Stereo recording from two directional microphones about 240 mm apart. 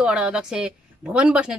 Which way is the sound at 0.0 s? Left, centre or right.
Centre.